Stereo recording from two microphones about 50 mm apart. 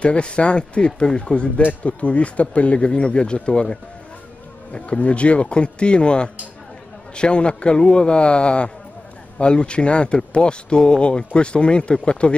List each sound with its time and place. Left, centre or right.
0.0 s speech: left
1.6 s speech: left